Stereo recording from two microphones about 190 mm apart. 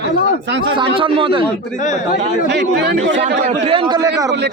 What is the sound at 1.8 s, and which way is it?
Speech, 40° left (ahead or behind).